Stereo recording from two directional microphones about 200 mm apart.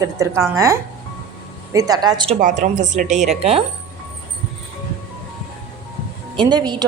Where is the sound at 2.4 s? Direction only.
40° right (ahead or behind).